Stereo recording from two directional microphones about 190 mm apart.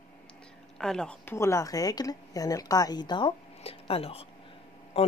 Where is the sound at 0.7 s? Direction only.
5° left (ahead or behind).